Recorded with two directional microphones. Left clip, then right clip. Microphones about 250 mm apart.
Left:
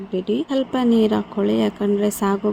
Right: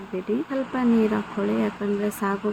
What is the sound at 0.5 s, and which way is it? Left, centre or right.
Speech, left.